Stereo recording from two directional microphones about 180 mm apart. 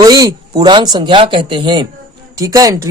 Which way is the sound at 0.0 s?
20° right (ahead or behind).